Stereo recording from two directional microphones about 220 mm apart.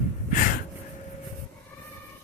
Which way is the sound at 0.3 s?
35° left (ahead or behind).